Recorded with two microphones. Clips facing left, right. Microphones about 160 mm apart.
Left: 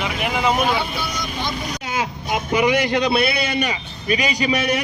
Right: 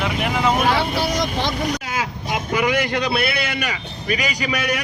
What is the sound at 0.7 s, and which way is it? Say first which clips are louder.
Speech: right 3 dB; 80° right.